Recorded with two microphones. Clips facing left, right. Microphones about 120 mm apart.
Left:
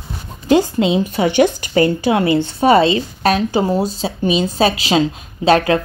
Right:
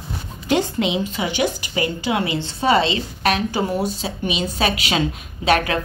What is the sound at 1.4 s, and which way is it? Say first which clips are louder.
A woman's voice: left 9 dB; 45° left (ahead or behind).